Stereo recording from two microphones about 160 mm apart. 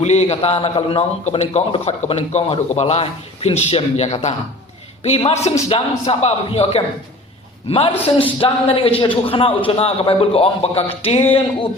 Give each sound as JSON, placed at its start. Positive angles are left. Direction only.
{"t": 0.0, "sound": "a man's voice", "side_deg": 45}